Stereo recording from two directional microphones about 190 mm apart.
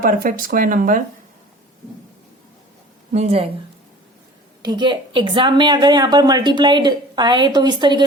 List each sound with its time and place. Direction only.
0.0 s speech: 50° right (ahead or behind)
3.1 s speech: 35° right (ahead or behind)
4.6 s a woman's voice: 25° right (ahead or behind)